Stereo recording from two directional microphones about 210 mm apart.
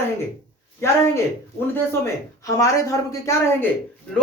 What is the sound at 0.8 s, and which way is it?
A man's voice, 10° left (ahead or behind).